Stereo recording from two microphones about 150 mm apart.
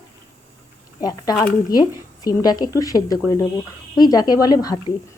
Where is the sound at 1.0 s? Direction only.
25° left (ahead or behind).